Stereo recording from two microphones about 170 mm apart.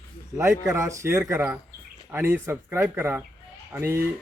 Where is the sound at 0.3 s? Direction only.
15° right (ahead or behind).